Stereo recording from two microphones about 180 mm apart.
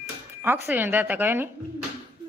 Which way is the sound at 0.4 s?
10° right (ahead or behind).